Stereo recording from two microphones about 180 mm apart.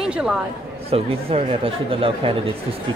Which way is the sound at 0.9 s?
35° right (ahead or behind).